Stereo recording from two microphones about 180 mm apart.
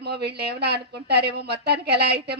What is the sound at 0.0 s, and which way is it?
A woman's voice, 65° right (ahead or behind).